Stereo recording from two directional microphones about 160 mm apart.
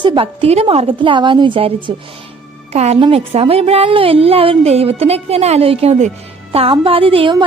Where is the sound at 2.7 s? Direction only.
40° right (ahead or behind).